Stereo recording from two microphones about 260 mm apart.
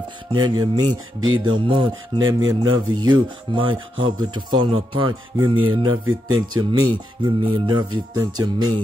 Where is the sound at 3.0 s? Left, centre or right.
Centre.